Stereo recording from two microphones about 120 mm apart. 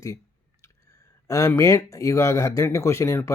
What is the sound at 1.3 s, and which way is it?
Speech, 25° left (ahead or behind).